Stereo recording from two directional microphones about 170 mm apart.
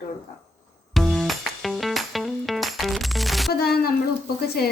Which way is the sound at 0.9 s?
Centre (ahead or behind).